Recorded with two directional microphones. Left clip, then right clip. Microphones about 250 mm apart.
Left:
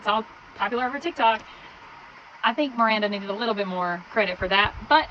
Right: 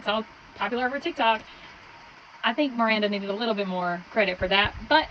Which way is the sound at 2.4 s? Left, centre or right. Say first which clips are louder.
Left 2 dB; left.